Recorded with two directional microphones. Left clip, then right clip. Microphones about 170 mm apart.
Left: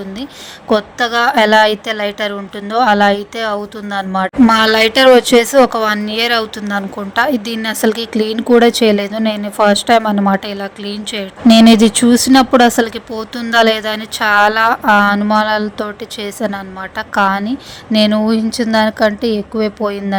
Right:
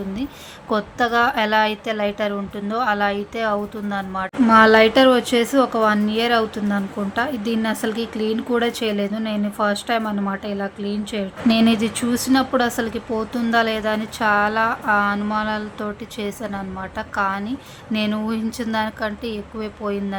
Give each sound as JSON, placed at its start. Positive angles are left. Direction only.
{"t": 0.7, "sound": "a woman's voice", "side_deg": 30}
{"t": 4.4, "sound": "a woman's voice", "side_deg": 45}